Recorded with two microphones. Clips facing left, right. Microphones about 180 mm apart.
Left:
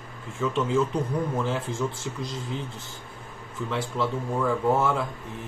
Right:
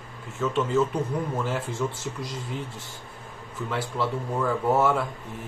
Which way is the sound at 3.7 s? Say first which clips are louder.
Even; 5° right (ahead or behind).